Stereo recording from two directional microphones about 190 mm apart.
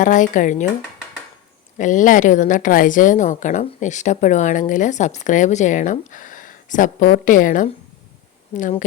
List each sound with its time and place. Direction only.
0.0 s speech: 40° left (ahead or behind)
1.8 s a woman's voice: 40° left (ahead or behind)